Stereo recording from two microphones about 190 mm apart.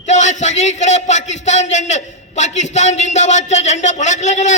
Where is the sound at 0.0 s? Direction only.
40° left (ahead or behind).